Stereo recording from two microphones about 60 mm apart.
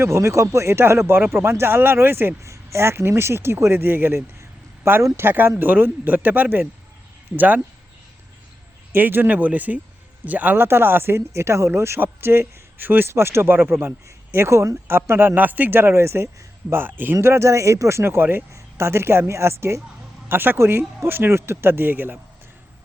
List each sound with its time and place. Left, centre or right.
0.0 s speech: right
2.4 s speech: right
8.9 s a man's voice: right
13.1 s speech: right
14.8 s speech: right
15.4 s speech: right
17.2 s speech: right
18.5 s speech: right
20.2 s speech: right